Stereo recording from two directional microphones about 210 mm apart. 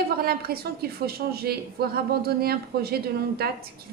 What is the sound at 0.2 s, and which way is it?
A man's voice, 45° right (ahead or behind).